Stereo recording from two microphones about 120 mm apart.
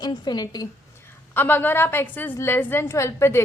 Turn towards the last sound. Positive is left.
turn(degrees=20)  # may be behind; listen again after turning